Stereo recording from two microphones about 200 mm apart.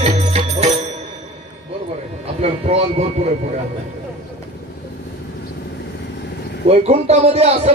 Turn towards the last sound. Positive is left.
turn(degrees=-30)  # may be behind; listen again after turning